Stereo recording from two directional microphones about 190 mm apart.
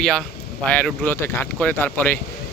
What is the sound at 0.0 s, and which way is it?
Speech, 5° left (ahead or behind).